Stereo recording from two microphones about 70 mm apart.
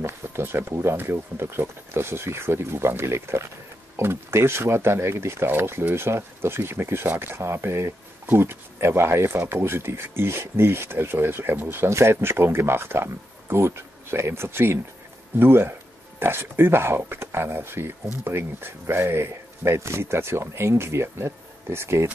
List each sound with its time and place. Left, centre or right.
0.0 s speech: right